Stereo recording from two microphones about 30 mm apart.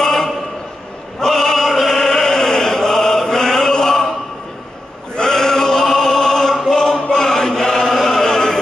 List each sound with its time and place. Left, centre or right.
0.0 s a sound: centre
1.2 s chant: centre
5.1 s chant: left
5.9 s music: centre
6.7 s chant: centre
7.1 s chant: centre